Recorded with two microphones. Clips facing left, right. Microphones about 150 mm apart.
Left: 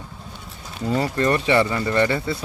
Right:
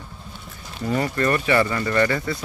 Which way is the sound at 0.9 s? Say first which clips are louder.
Left 1 dB; 25° left (ahead or behind).